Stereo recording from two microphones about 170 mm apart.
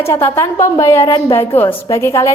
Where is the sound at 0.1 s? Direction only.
15° left (ahead or behind).